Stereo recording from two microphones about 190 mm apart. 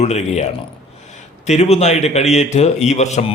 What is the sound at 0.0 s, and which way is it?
Speech, 35° left (ahead or behind).